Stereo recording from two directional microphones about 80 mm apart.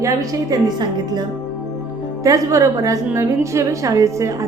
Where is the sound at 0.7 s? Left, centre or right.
Right.